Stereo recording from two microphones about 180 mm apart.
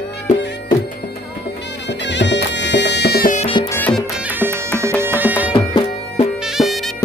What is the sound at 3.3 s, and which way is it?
Music, 30° left (ahead or behind).